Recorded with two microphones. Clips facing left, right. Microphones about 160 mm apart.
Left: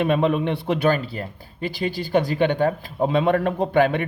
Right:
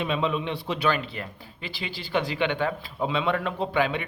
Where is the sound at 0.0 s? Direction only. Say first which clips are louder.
Left 7 dB; 55° left (ahead or behind).